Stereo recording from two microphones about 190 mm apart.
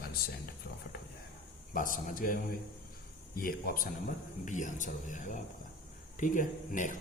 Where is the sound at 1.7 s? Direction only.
45° left (ahead or behind).